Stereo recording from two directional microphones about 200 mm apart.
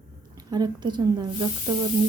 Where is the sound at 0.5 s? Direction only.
20° right (ahead or behind).